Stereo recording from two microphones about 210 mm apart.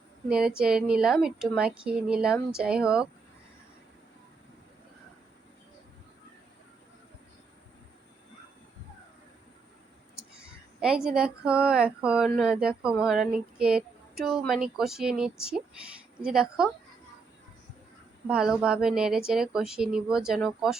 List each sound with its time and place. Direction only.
0.3 s a woman's voice: 5° right (ahead or behind)
10.2 s a woman's voice: 5° right (ahead or behind)
18.3 s a woman's voice: 5° right (ahead or behind)